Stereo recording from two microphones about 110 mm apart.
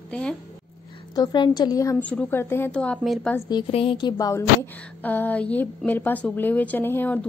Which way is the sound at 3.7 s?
55° left (ahead or behind).